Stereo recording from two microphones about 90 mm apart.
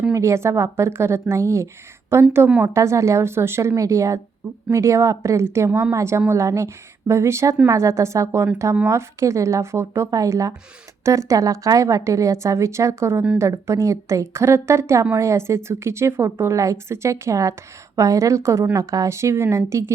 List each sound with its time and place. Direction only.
0.1 s speech: 30° right (ahead or behind)